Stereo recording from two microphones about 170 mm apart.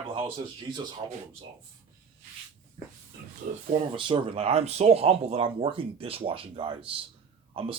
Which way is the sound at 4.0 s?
30° right (ahead or behind).